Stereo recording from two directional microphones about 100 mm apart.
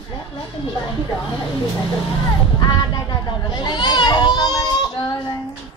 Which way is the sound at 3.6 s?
45° left (ahead or behind).